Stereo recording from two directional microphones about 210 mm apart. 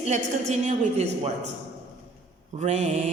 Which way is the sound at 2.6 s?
35° right (ahead or behind).